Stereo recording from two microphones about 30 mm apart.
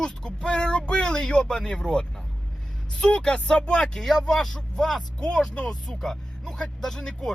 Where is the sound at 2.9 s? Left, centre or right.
Left.